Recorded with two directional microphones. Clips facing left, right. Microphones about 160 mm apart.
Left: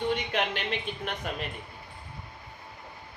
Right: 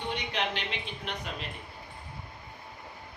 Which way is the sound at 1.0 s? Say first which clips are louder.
Left 4 dB; 50° left (ahead or behind).